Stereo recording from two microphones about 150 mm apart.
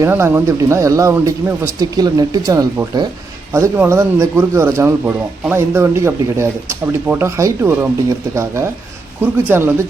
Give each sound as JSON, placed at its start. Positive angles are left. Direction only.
{"t": 0.0, "sound": "speech", "side_deg": -15}